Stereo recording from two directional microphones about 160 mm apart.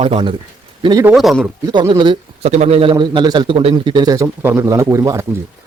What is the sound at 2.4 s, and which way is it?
A man's voice, 45° right (ahead or behind).